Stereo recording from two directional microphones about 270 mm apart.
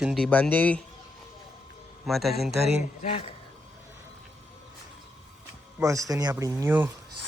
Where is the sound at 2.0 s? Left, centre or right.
Centre.